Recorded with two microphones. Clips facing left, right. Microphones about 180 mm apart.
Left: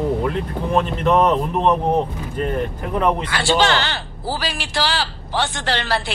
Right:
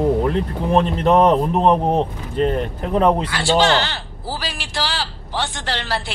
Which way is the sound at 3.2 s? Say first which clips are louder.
Right 1 dB; 65° left (ahead or behind).